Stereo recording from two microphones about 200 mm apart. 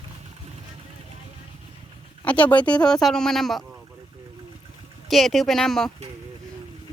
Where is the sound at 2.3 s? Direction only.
5° left (ahead or behind).